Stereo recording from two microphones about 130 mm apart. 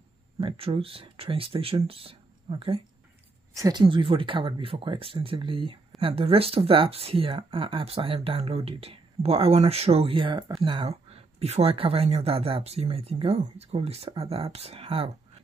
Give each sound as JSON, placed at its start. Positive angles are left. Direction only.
{"t": 0.4, "sound": "speech", "side_deg": -45}
{"t": 3.5, "sound": "speech", "side_deg": -25}
{"t": 3.8, "sound": "speech", "side_deg": -40}
{"t": 10.9, "sound": "speech", "side_deg": -50}